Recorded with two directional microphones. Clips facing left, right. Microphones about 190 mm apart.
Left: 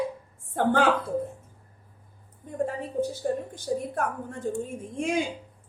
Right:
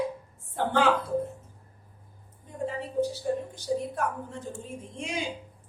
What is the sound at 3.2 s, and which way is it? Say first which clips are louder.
A woman's voice: left 1 dB; 50° left (ahead or behind).